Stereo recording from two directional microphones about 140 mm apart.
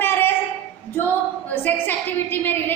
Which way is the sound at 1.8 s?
15° left (ahead or behind).